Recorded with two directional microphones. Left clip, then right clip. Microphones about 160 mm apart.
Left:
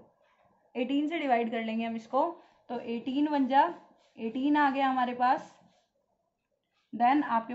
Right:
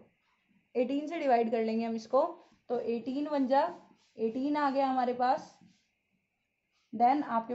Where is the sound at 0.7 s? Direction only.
90° right.